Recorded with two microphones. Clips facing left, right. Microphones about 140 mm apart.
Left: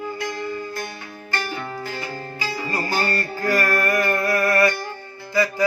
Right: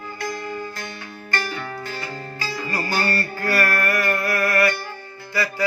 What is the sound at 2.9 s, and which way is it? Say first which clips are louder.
Music: even; 15° left (ahead or behind).